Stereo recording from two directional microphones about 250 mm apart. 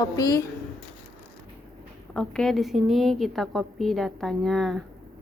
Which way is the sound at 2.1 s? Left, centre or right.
Centre.